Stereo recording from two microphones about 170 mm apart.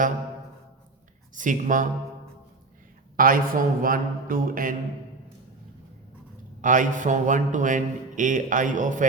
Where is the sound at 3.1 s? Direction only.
55° right (ahead or behind).